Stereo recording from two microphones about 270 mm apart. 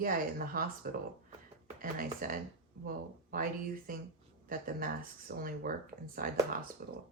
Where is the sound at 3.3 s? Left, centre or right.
Right.